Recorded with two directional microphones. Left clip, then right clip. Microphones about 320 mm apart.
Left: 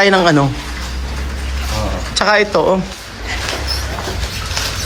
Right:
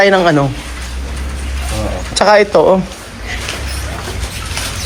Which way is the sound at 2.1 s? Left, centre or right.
Centre.